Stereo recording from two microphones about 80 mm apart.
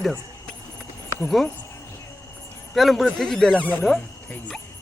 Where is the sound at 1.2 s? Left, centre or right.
Centre.